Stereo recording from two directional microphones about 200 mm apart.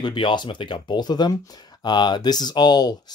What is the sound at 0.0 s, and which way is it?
Speech, 25° left (ahead or behind).